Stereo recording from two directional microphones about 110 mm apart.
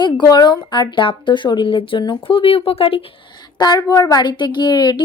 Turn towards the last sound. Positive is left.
turn(degrees=40)  # may be behind; listen again after turning